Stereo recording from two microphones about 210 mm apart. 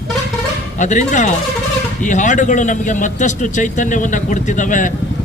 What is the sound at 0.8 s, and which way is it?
A man's voice, 35° left (ahead or behind).